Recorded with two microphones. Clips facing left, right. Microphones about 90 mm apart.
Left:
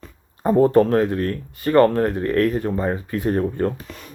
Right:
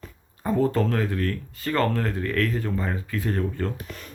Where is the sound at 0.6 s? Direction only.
20° left (ahead or behind).